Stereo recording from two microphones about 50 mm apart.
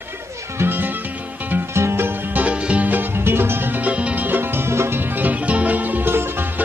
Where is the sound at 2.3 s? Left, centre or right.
Right.